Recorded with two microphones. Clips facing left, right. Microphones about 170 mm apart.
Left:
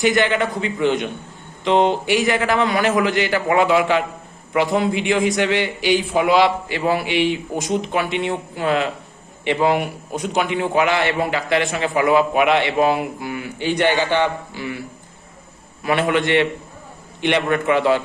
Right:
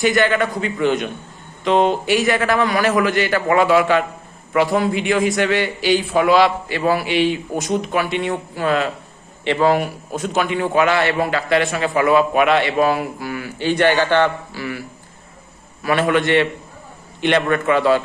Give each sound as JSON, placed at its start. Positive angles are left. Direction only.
{"t": 0.0, "sound": "a man's voice", "side_deg": 20}
{"t": 15.8, "sound": "a man's voice", "side_deg": 20}